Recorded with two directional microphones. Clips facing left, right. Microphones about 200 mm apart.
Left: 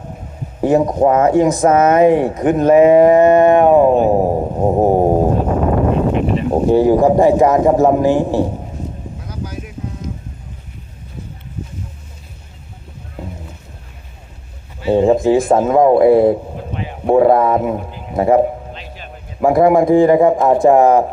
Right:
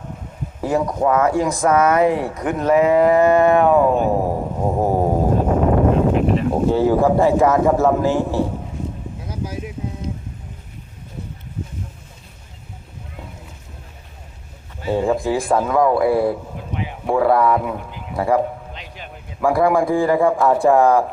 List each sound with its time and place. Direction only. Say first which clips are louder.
0.6 s speech: left 6 dB; 25° left (ahead or behind)
6.1 s speech: left 1 dB; centre (ahead or behind)
6.7 s a man's voice: left 5 dB; 15° left (ahead or behind)
9.2 s a sound: right 1 dB; 25° right (ahead or behind)
14.8 s a man's voice: left 7 dB; 25° left (ahead or behind)